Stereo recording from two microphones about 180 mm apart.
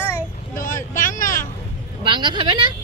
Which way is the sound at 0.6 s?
50° left (ahead or behind).